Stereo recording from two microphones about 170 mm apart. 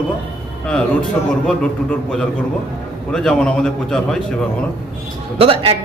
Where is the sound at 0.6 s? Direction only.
5° left (ahead or behind).